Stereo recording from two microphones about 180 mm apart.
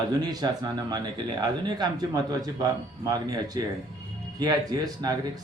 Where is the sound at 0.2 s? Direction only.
20° right (ahead or behind).